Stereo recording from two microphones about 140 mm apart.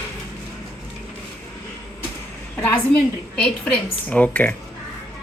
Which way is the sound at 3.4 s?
10° left (ahead or behind).